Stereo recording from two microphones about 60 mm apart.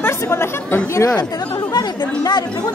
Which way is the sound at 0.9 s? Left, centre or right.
Left.